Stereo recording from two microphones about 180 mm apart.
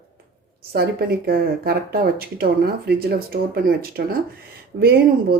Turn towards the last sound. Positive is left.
turn(degrees=-65)  # may be behind; listen again after turning